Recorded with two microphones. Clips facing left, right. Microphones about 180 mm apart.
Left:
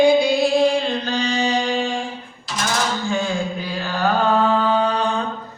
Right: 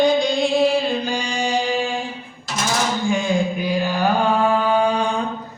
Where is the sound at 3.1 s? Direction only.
15° right (ahead or behind).